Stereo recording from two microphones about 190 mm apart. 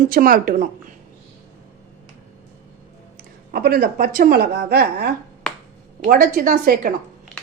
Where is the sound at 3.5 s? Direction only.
55° right (ahead or behind).